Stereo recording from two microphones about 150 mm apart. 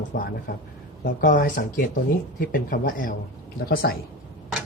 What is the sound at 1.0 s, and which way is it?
Speech, 75° left (ahead or behind).